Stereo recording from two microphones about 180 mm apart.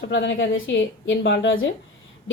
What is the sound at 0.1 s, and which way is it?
A woman's voice, 90° left.